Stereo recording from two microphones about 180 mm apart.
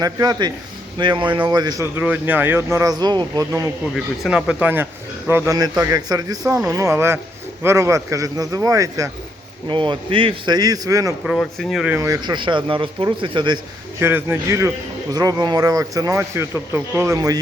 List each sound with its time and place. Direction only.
0.0 s speech: 20° right (ahead or behind)
3.9 s a man's voice: centre (ahead or behind); by 11.1 s 20° right (ahead or behind)
11.3 s speech: centre (ahead or behind)
11.9 s speech: 20° right (ahead or behind)
14.0 s a man's voice: 15° right (ahead or behind)